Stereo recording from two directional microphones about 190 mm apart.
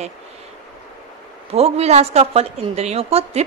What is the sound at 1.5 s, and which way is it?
A woman's voice, 30° right (ahead or behind).